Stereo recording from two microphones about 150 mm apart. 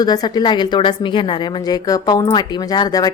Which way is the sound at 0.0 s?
25° left (ahead or behind).